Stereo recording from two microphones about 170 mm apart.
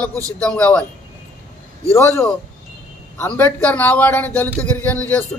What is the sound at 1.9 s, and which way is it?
A man's voice, 15° left (ahead or behind).